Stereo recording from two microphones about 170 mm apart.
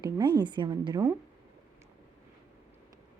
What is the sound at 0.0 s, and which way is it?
Speech, 25° right (ahead or behind).